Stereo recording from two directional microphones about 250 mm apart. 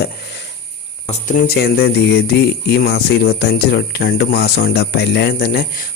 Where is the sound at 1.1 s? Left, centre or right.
Left.